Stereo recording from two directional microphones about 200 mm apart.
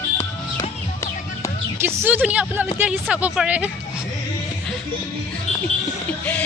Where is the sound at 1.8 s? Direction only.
10° right (ahead or behind).